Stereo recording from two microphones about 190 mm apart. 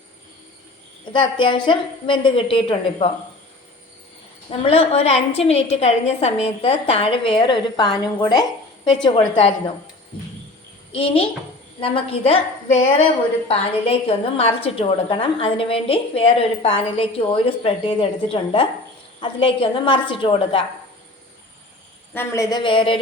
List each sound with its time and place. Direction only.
1.1 s a woman's voice: 25° left (ahead or behind)
4.4 s a woman's voice: 30° left (ahead or behind)
10.9 s a woman's voice: 30° left (ahead or behind)
22.1 s a woman's voice: 10° left (ahead or behind)